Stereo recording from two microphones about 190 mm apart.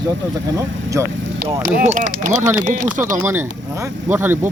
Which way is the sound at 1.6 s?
45° right (ahead or behind).